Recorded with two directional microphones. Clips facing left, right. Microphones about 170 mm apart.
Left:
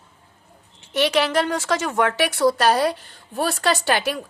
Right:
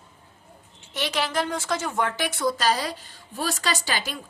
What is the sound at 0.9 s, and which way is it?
A woman's voice, 65° left (ahead or behind).